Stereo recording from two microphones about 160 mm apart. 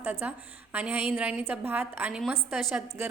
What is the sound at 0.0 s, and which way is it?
A woman's voice, 10° right (ahead or behind).